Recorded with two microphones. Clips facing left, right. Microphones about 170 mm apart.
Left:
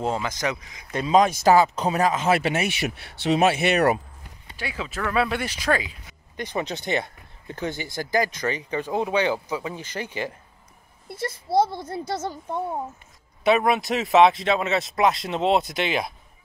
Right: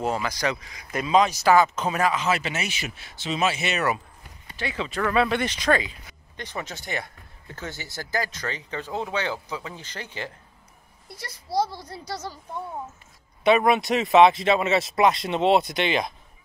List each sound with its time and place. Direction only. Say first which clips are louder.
0.0 s speech: even; 25° left (ahead or behind)
0.9 s a woman's voice: left 2 dB; 40° left (ahead or behind)
1.4 s speech: left 1 dB; 30° left (ahead or behind)
2.2 s speech: left 5 dB; 55° left (ahead or behind)
4.6 s speech: right 3 dB; 10° left (ahead or behind)
11.1 s a child's voice: left 8 dB; 50° left (ahead or behind)
13.4 s speech: right 1 dB; centre (ahead or behind)